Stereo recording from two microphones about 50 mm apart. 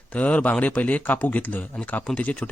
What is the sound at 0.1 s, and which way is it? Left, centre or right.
A man's voice, left.